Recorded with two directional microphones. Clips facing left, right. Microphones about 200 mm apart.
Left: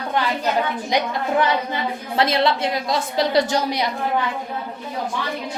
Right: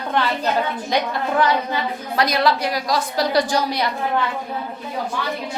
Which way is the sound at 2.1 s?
25° left (ahead or behind).